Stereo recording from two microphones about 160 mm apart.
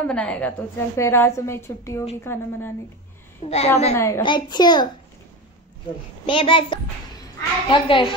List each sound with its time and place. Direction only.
0.0 s a woman's voice: 5° left (ahead or behind)
3.4 s a child's voice: 40° left (ahead or behind)
3.9 s a woman's voice: 15° left (ahead or behind)
4.2 s a child's voice: 30° left (ahead or behind)
6.2 s a child's voice: 30° left (ahead or behind)